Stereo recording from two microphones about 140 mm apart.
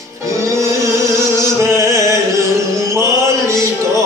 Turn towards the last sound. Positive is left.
turn(degrees=-20)  # may be behind; listen again after turning